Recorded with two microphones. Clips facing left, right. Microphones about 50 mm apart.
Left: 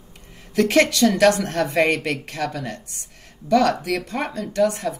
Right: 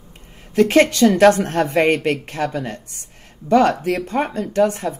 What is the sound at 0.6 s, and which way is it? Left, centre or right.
Speech, right.